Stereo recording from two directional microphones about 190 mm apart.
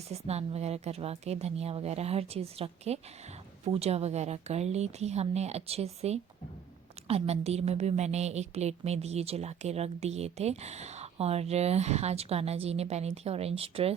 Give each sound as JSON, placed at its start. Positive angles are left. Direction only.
{"t": 0.1, "sound": "a woman's voice", "side_deg": -35}